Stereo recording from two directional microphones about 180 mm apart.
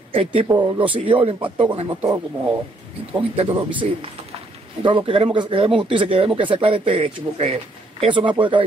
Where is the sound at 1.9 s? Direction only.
15° right (ahead or behind).